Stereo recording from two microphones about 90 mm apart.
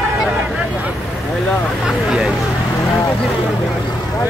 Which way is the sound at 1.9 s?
5° right (ahead or behind).